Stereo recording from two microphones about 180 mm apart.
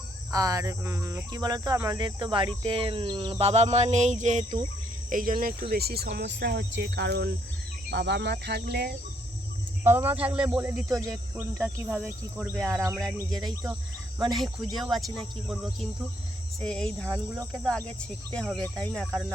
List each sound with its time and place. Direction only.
0.3 s speech: 20° right (ahead or behind)
2.6 s a sound: 30° right (ahead or behind)
5.0 s speech: 50° right (ahead or behind)
5.7 s speech: 60° right (ahead or behind)
9.8 s speech: 15° right (ahead or behind)
11.6 s speech: centre (ahead or behind)
12.6 s speech: 15° right (ahead or behind)
12.9 s speech: centre (ahead or behind)
14.3 s speech: centre (ahead or behind)